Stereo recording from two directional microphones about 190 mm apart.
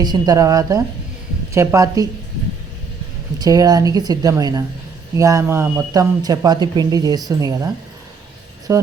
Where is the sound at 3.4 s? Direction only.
20° right (ahead or behind).